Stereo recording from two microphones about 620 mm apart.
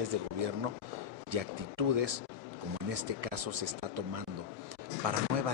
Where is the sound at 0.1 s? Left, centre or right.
Right.